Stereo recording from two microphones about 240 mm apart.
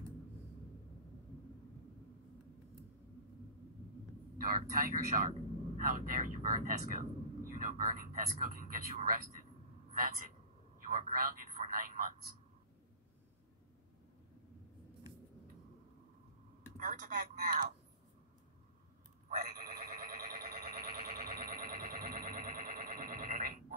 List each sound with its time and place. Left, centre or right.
4.4 s a man's voice: right
16.7 s speech: right
19.2 s sheep: right